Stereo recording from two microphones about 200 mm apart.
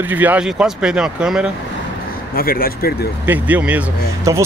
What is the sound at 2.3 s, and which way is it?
Speech, 45° left (ahead or behind).